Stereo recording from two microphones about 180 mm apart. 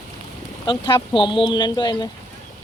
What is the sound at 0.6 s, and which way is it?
Speech, 25° left (ahead or behind).